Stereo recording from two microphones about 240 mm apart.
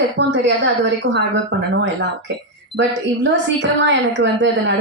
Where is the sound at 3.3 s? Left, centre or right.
Right.